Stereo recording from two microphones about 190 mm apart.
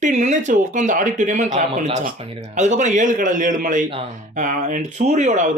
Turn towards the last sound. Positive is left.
turn(degrees=-40)  # may be behind; listen again after turning